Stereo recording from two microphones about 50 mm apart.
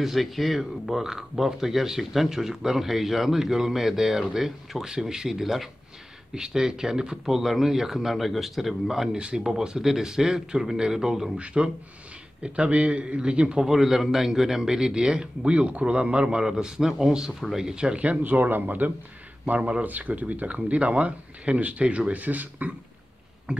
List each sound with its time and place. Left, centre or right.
0.0 s speech: centre
11.3 s speech: right
13.6 s speech: centre
18.2 s speech: right
23.5 s speech: right